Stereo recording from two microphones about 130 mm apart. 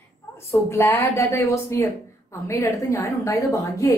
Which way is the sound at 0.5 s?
20° left (ahead or behind).